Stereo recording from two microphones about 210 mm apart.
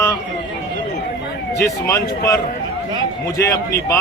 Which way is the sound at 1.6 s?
15° left (ahead or behind).